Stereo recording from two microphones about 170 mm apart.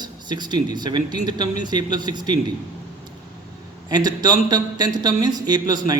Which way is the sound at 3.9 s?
25° right (ahead or behind).